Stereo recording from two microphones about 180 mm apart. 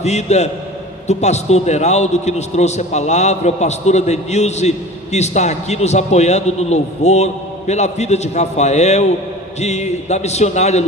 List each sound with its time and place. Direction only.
0.0 s a man's voice: 40° left (ahead or behind)